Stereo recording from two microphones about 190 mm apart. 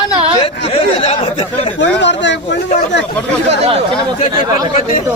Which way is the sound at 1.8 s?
70° left (ahead or behind).